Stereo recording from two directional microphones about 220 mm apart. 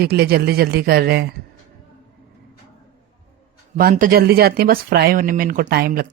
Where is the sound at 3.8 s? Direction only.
40° right (ahead or behind).